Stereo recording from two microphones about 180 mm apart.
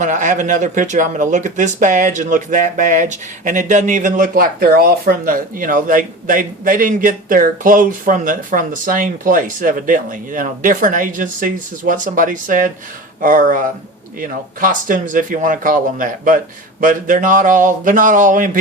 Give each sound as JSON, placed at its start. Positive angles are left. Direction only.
{"t": 0.0, "sound": "speech", "side_deg": -45}